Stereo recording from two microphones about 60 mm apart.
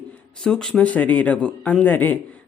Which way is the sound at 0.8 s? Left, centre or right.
Left.